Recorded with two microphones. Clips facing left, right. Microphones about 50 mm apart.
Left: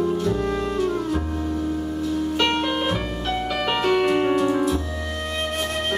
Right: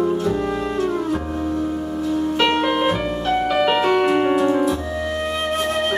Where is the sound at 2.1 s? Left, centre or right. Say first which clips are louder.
Right 4 dB; centre.